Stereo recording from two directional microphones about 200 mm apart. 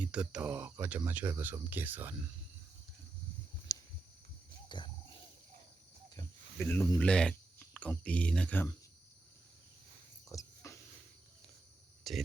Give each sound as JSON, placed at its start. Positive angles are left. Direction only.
{"t": 0.0, "sound": "speech", "side_deg": -5}
{"t": 3.7, "sound": "a sound", "side_deg": 15}
{"t": 4.7, "sound": "wild animals", "side_deg": 20}
{"t": 6.1, "sound": "speech", "side_deg": 10}
{"t": 10.2, "sound": "a sound", "side_deg": 15}
{"t": 12.1, "sound": "speech", "side_deg": 0}